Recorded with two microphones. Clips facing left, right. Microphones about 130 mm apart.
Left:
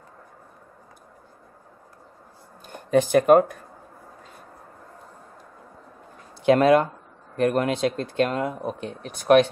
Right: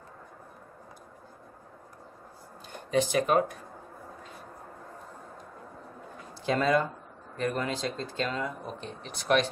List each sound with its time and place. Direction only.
2.7 s speech: 50° left (ahead or behind)
6.4 s speech: 65° left (ahead or behind)